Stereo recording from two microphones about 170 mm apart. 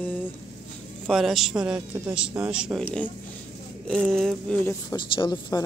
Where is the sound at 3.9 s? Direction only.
Centre (ahead or behind).